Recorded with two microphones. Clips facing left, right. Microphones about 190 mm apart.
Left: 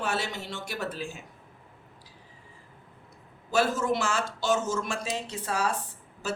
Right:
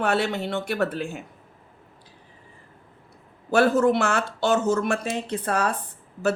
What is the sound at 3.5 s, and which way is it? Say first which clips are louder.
Speech: right 7 dB; 60° right (ahead or behind).